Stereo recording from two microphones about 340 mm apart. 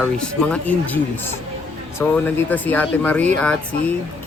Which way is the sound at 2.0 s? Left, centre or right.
Centre.